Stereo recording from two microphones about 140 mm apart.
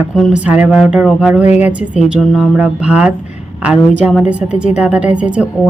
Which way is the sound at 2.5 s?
5° right (ahead or behind).